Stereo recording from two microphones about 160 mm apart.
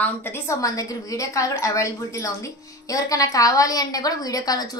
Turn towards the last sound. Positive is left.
turn(degrees=25)  # may be behind; listen again after turning